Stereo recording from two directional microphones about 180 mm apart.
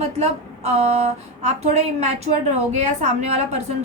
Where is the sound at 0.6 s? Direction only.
35° right (ahead or behind).